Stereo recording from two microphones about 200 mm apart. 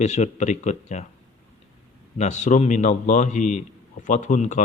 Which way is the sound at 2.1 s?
35° left (ahead or behind).